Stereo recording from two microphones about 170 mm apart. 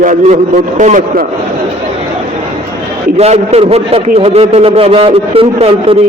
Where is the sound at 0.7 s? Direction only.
50° right (ahead or behind).